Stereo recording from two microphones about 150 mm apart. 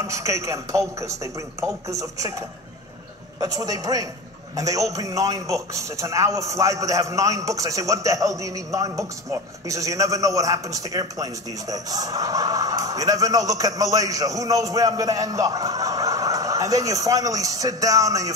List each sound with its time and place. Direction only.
0.0 s a man's voice: 20° right (ahead or behind)